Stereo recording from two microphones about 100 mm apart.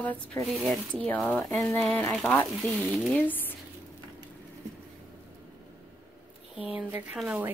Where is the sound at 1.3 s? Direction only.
20° left (ahead or behind).